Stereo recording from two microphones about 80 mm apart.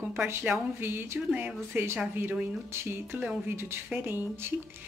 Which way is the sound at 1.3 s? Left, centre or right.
Centre.